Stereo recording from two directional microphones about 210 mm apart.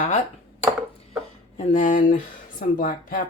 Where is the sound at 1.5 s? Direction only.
35° left (ahead or behind).